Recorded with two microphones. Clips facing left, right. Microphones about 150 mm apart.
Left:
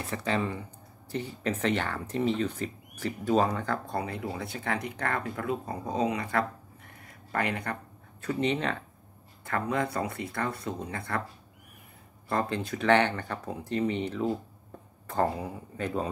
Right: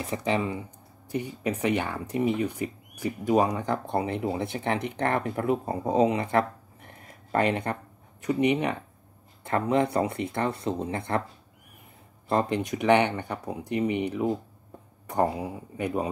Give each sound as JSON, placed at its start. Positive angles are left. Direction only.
{"t": 0.0, "sound": "speech", "side_deg": -15}
{"t": 12.3, "sound": "speech", "side_deg": -20}